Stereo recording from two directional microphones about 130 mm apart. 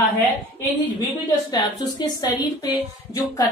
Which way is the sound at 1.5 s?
30° left (ahead or behind).